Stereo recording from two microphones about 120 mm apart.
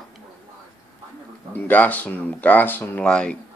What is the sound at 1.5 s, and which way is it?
Speech, 15° left (ahead or behind).